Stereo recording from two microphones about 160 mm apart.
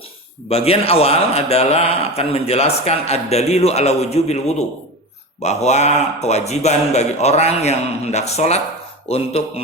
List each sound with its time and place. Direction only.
0.4 s a man's voice: 40° left (ahead or behind)